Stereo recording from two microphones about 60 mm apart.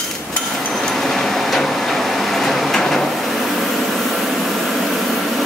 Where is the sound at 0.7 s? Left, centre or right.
Centre.